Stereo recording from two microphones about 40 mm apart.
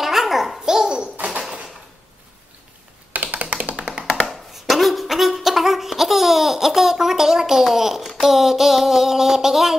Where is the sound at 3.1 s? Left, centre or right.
Right.